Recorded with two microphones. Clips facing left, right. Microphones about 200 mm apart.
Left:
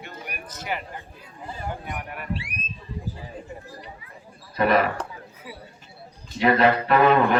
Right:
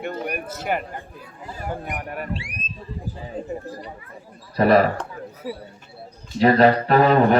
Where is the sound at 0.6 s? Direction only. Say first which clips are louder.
Right 4 dB; 50° right (ahead or behind).